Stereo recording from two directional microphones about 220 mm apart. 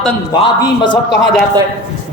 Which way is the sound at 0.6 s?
20° left (ahead or behind).